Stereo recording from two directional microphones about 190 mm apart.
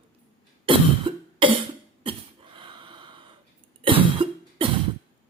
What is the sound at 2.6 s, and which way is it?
Gasp, 25° right (ahead or behind).